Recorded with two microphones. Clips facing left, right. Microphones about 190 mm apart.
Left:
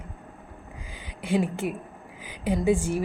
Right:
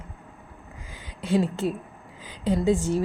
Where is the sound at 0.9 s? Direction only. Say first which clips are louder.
Right 2 dB; 15° left (ahead or behind).